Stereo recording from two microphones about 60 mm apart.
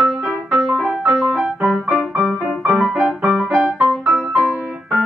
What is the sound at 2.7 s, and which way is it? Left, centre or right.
Music, centre.